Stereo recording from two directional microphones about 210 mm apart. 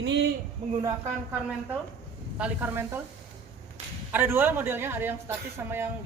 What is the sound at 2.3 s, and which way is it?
Speech, 5° right (ahead or behind).